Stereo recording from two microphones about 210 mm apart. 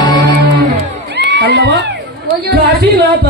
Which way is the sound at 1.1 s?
50° right (ahead or behind).